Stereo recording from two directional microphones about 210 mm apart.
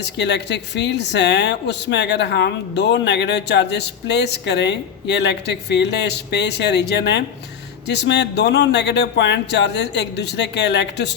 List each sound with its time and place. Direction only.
0.0 s speech: 55° left (ahead or behind)